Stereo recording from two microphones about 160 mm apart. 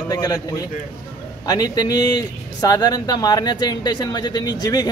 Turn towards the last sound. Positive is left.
turn(degrees=25)  # may be behind; listen again after turning